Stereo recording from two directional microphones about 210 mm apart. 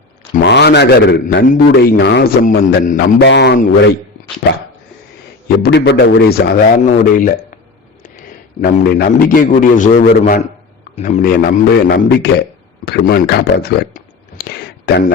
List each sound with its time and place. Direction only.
0.4 s a man's voice: 55° left (ahead or behind)
3.2 s a man's voice: 55° left (ahead or behind)
5.6 s a man's voice: 55° left (ahead or behind); by 7.6 s 40° left (ahead or behind)
8.6 s a man's voice: 45° left (ahead or behind)
11.9 s a man's voice: 55° left (ahead or behind)